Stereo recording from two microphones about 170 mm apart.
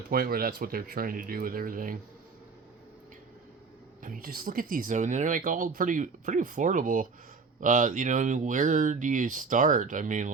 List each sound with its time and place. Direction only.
0.1 s speech: 60° right (ahead or behind)
4.0 s speech: 55° right (ahead or behind)